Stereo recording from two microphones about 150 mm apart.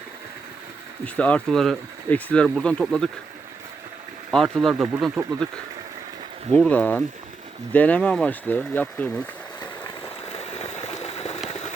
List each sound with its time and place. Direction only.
1.0 s speech: 10° left (ahead or behind)
4.3 s speech: 5° left (ahead or behind)
6.5 s speech: 10° left (ahead or behind)
10.3 s boiling: 40° left (ahead or behind)